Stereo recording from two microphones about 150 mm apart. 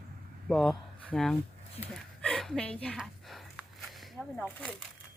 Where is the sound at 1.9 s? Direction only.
Centre (ahead or behind).